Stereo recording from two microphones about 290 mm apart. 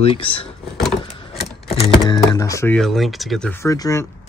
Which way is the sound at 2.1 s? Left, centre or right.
Centre.